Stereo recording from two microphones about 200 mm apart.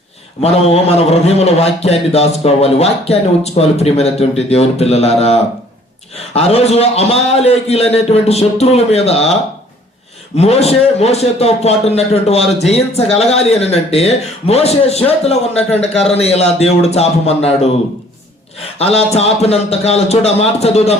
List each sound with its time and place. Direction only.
0.4 s a man's voice: 30° left (ahead or behind)